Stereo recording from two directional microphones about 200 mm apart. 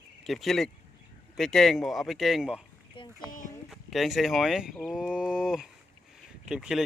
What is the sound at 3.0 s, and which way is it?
Speech, 25° left (ahead or behind).